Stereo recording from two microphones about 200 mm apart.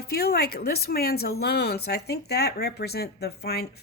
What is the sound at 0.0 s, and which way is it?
Speech, 50° left (ahead or behind).